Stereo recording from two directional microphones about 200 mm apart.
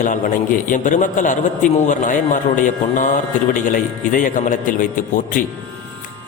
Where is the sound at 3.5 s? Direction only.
40° left (ahead or behind).